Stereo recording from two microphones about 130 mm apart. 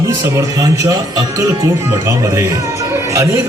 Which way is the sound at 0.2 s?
25° right (ahead or behind).